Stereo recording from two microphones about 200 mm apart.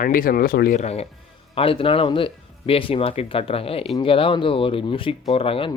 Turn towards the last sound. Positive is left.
turn(degrees=25)  # may be behind; listen again after turning